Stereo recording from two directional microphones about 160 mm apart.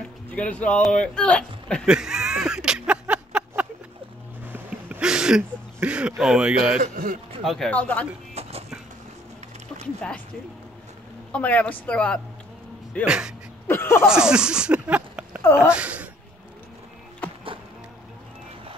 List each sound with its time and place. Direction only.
0.3 s speech: 10° left (ahead or behind)
1.9 s a sound: 5° right (ahead or behind)
6.8 s a man's voice: 65° right (ahead or behind)
7.4 s speech: centre (ahead or behind)
8.4 s a sound: 40° right (ahead or behind)
9.9 s speech: 5° left (ahead or behind)
11.3 s speech: 10° left (ahead or behind)
13.0 s speech: 5° right (ahead or behind)
13.7 s a sound: 15° left (ahead or behind)
14.0 s speech: 5° right (ahead or behind)
15.4 s speech: 15° left (ahead or behind)
15.7 s speech: 10° right (ahead or behind)